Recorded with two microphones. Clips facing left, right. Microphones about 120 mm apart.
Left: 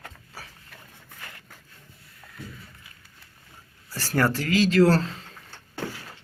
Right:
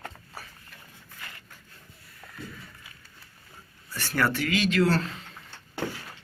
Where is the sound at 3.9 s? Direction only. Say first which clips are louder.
Left 3 dB; 35° left (ahead or behind).